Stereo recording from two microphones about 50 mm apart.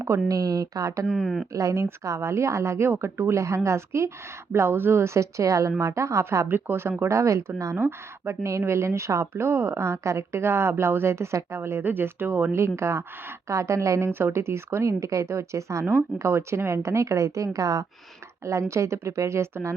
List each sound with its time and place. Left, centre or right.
0.1 s a woman's voice: right
1.0 s speech: centre
1.5 s a woman's voice: right
4.5 s a woman's voice: right
6.5 s speech: right
7.1 s a woman's voice: right
7.8 s speech: right
8.4 s a woman's voice: right
9.2 s speech: right
11.8 s speech: right
12.5 s speech: right
13.5 s a woman's voice: right
14.1 s a woman's voice: right
16.1 s a woman's voice: right